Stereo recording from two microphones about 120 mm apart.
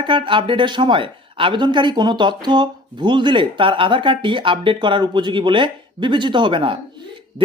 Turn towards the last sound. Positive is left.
turn(degrees=-45)  # may be behind; listen again after turning